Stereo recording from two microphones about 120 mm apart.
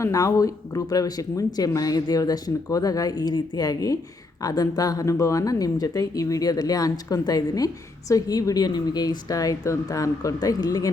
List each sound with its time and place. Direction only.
0.0 s speech: 30° left (ahead or behind)